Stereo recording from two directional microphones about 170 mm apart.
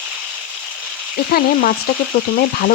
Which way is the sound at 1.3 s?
65° left (ahead or behind).